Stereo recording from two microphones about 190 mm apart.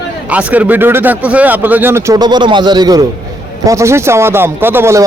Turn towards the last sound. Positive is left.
turn(degrees=-15)  # may be behind; listen again after turning